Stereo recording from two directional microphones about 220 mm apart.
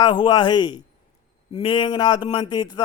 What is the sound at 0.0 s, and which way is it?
A man's voice, 20° left (ahead or behind).